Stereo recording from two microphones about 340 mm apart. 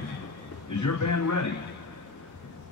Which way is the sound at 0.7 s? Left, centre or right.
Left.